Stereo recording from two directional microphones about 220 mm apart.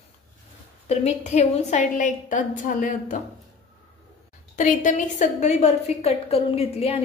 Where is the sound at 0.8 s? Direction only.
30° left (ahead or behind).